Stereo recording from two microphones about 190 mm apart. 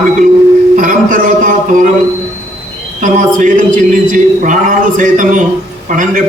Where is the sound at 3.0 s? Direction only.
45° right (ahead or behind).